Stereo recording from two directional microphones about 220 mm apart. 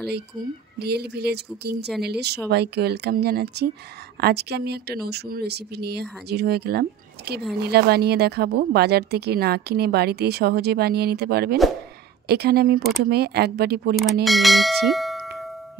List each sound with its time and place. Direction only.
0.7 s speech: 45° right (ahead or behind)
14.2 s speech: centre (ahead or behind)